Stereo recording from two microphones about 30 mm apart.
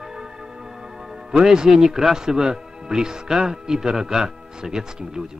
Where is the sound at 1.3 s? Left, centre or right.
Right.